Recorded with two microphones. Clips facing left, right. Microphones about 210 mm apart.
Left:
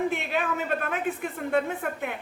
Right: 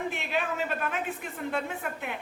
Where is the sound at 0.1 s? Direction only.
50° left (ahead or behind).